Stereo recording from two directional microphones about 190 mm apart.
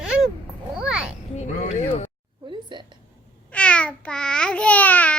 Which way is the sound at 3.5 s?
5° left (ahead or behind).